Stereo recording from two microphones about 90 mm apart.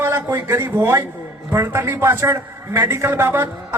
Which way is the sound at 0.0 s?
25° right (ahead or behind).